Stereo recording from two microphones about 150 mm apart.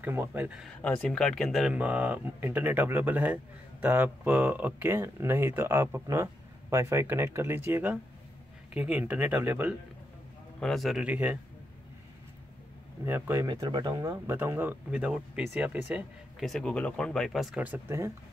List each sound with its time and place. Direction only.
0.0 s speech: 15° right (ahead or behind)
0.7 s speech: 5° left (ahead or behind); by 9.8 s 10° right (ahead or behind)
10.6 s speech: centre (ahead or behind)
13.0 s speech: 15° right (ahead or behind)
13.5 s speech: 30° right (ahead or behind); by 16.4 s 10° right (ahead or behind)
16.4 s speech: 5° left (ahead or behind); by 18.1 s 15° right (ahead or behind)